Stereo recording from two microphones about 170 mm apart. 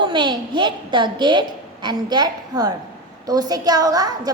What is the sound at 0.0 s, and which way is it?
A woman's voice, 25° right (ahead or behind).